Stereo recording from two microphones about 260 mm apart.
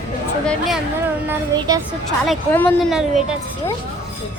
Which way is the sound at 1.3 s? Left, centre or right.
Centre.